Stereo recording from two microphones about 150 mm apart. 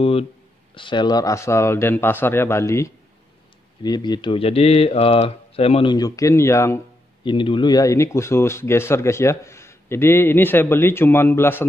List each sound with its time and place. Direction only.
0.0 s speech: 40° left (ahead or behind)
5.9 s speech: 25° left (ahead or behind)
7.2 s speech: 35° left (ahead or behind); by 11.6 s 15° left (ahead or behind)